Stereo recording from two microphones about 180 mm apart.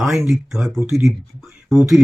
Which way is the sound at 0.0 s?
Centre (ahead or behind).